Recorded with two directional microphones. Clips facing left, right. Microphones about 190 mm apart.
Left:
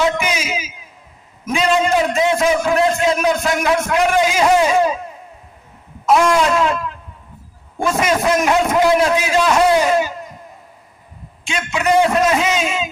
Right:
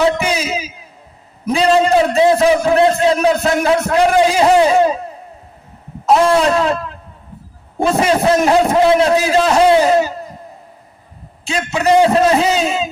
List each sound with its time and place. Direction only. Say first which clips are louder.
0.0 s a sound: right 3 dB; 35° right (ahead or behind)
1.5 s a man's voice: right 4 dB; 35° right (ahead or behind)
11.4 s a man's voice: right 3 dB; 35° right (ahead or behind)